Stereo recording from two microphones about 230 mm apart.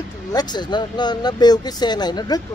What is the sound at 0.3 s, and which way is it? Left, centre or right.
Speech, centre.